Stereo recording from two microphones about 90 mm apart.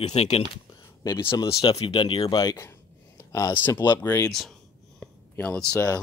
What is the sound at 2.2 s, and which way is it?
Speech, 45° left (ahead or behind).